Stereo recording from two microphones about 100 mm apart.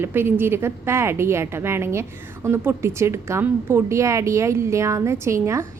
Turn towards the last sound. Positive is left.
turn(degrees=-30)  # may be behind; listen again after turning